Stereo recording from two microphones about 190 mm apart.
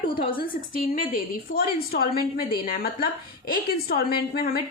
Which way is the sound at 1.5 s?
55° left (ahead or behind).